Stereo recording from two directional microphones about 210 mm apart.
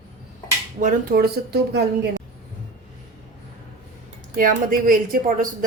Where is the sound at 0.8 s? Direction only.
45° right (ahead or behind).